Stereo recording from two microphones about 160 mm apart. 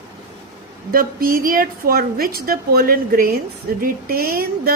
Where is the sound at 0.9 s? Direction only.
65° right (ahead or behind).